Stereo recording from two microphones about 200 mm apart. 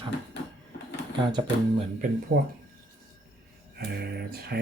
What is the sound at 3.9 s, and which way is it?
Speech, 50° right (ahead or behind).